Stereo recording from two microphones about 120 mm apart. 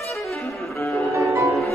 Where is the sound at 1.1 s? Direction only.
25° right (ahead or behind).